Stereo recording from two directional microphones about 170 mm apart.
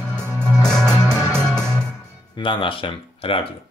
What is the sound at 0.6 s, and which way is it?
Music, 5° left (ahead or behind).